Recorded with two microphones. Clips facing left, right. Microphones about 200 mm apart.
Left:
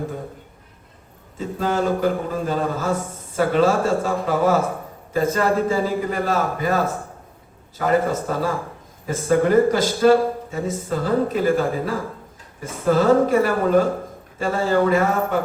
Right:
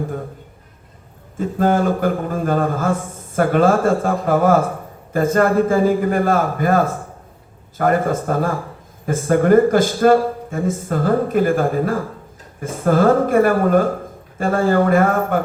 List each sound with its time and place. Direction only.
1.4 s a man's voice: 50° right (ahead or behind)